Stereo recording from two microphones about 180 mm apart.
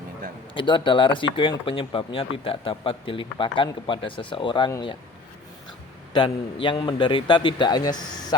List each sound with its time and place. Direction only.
0.5 s speech: 25° left (ahead or behind)
6.1 s speech: 25° left (ahead or behind)